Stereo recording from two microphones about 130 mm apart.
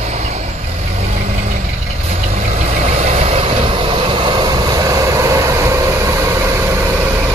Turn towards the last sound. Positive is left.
turn(degrees=-25)  # may be behind; listen again after turning